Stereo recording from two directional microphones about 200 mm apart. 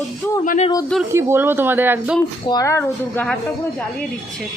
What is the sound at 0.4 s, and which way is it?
Speech, 40° left (ahead or behind).